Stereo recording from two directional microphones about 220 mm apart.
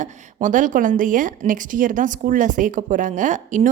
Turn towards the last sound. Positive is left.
turn(degrees=-35)  # may be behind; listen again after turning